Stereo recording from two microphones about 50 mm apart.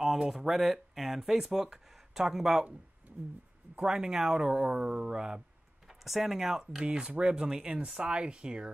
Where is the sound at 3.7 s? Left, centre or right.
Centre.